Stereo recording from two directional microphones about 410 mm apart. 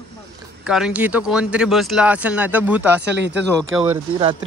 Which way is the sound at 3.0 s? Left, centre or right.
Right.